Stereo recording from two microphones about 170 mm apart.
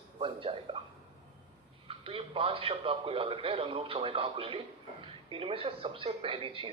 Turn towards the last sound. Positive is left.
turn(degrees=-30)  # may be behind; listen again after turning